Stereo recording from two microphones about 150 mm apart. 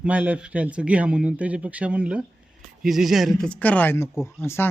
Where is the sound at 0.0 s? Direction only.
10° right (ahead or behind).